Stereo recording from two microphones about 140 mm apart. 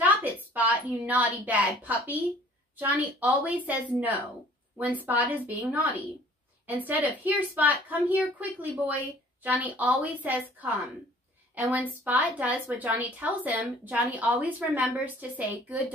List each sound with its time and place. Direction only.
0.0 s a sound: 10° right (ahead or behind)
2.8 s a woman's voice: 10° right (ahead or behind)
11.5 s a woman's voice: 10° right (ahead or behind)